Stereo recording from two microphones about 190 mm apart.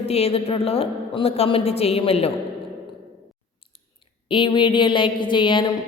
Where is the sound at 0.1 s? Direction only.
30° left (ahead or behind).